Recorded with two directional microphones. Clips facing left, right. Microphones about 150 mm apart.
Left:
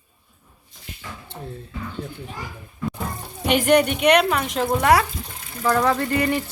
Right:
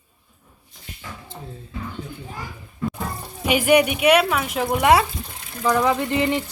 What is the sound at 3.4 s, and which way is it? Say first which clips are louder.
Speech: even; 5° right (ahead or behind).